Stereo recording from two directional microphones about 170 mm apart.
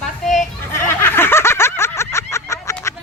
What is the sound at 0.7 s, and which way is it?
Snicker, 15° left (ahead or behind).